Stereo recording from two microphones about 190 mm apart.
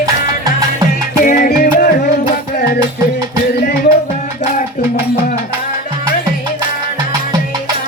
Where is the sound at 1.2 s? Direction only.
45° left (ahead or behind).